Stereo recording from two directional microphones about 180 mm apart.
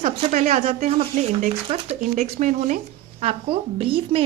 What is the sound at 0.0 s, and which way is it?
A woman's voice, 35° right (ahead or behind).